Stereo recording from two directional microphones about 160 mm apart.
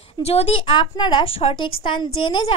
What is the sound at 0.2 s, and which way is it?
A woman's voice, 40° left (ahead or behind).